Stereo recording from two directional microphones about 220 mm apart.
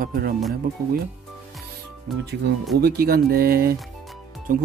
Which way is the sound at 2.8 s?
45° right (ahead or behind).